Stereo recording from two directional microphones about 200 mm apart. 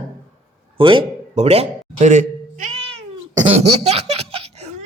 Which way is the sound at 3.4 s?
30° right (ahead or behind).